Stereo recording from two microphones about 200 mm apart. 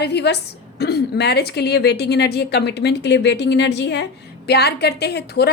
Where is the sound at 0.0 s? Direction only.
55° left (ahead or behind).